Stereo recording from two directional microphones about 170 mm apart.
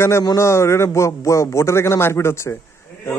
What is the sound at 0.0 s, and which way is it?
A man's voice, 20° left (ahead or behind).